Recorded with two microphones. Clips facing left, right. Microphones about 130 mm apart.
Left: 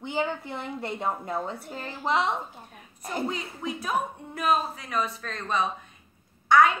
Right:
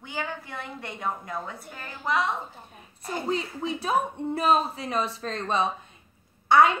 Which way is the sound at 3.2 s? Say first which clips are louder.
Right 4 dB; 30° right (ahead or behind).